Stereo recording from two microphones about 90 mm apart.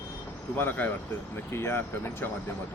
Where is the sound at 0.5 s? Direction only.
20° left (ahead or behind).